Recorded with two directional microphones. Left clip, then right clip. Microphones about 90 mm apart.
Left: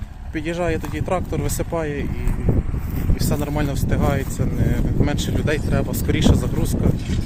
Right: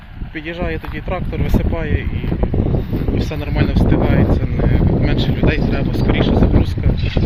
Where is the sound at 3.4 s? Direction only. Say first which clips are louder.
Right 5 dB; 25° left (ahead or behind).